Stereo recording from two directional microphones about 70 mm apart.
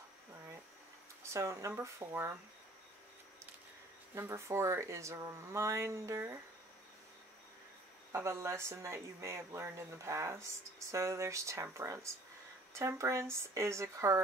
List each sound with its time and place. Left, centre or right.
1.2 s speech: right
4.1 s speech: right
8.1 s speech: right